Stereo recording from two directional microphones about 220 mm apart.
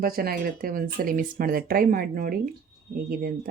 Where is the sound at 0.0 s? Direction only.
40° right (ahead or behind).